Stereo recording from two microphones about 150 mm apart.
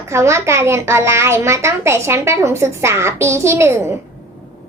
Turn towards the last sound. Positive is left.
turn(degrees=-20)  # may be behind; listen again after turning